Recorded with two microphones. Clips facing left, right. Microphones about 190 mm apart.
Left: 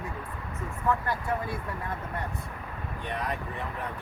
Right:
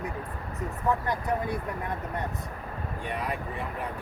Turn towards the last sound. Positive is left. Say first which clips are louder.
# right 1 dB
turn(degrees=-10)  # may be behind; listen again after turning